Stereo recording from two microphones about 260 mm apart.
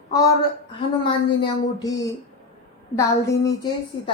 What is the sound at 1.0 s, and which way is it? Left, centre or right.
Speech, centre.